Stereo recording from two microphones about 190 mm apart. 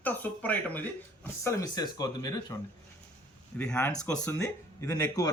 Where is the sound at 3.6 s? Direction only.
10° left (ahead or behind).